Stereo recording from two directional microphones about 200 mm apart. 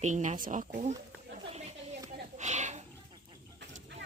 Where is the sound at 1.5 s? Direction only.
30° right (ahead or behind).